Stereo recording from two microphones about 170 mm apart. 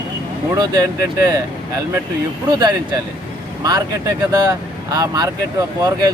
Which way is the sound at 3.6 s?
20° right (ahead or behind).